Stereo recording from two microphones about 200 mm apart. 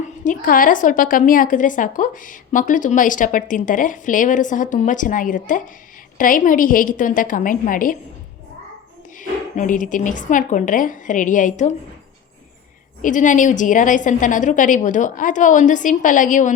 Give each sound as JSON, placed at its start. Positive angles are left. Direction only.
{"t": 0.0, "sound": "a woman's voice", "side_deg": 40}
{"t": 9.1, "sound": "a woman's voice", "side_deg": 40}
{"t": 13.0, "sound": "a woman's voice", "side_deg": 40}